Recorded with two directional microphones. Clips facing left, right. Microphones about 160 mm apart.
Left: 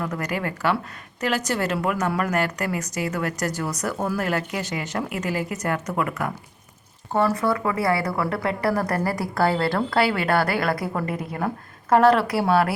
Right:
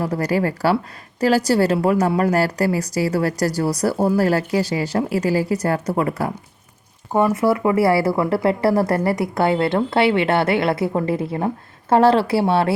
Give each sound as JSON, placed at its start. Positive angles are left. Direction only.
{"t": 0.0, "sound": "a woman's voice", "side_deg": -35}
{"t": 7.1, "sound": "a woman's voice", "side_deg": -15}